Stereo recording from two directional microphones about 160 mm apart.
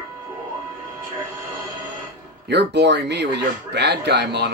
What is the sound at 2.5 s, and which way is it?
Speech, 90° right.